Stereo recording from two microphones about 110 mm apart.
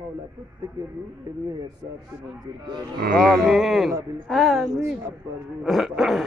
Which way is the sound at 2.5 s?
40° right (ahead or behind).